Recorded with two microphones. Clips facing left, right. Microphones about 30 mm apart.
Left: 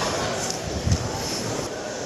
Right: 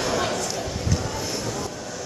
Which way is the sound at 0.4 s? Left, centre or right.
Centre.